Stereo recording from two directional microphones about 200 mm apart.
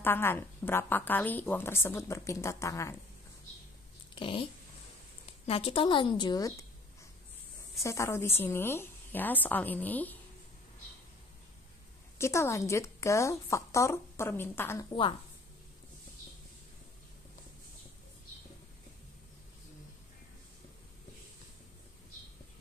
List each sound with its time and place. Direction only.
0.0 s a woman's voice: 10° left (ahead or behind)
4.1 s speech: 25° left (ahead or behind)
5.5 s a woman's voice: 30° left (ahead or behind)
7.8 s a woman's voice: 15° left (ahead or behind)
12.2 s a woman's voice: 15° left (ahead or behind)